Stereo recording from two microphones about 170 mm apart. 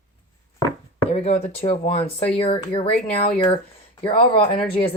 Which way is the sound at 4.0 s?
30° left (ahead or behind).